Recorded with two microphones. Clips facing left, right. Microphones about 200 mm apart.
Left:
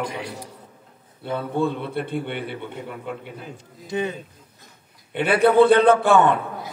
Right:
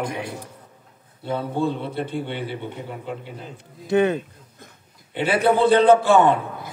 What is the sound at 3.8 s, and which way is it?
Speech, 60° right (ahead or behind).